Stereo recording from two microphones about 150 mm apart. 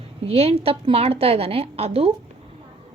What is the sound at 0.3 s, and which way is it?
A woman's voice, 45° right (ahead or behind).